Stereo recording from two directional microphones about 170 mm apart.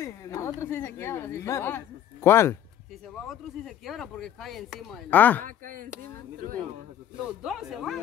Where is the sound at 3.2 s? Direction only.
Centre (ahead or behind).